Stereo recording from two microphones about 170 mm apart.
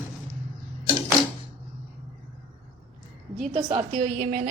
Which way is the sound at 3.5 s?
35° right (ahead or behind).